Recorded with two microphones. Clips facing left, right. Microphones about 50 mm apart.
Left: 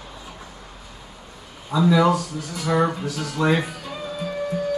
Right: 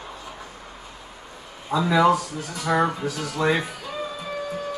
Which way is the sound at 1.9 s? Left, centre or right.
Centre.